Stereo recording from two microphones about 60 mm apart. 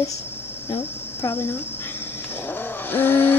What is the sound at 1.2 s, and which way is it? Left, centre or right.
Speech, left.